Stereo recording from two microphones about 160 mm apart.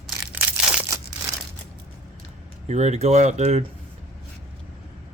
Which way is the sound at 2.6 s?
45° right (ahead or behind).